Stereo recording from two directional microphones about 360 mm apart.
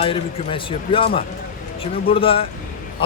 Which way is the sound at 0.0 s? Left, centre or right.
Centre.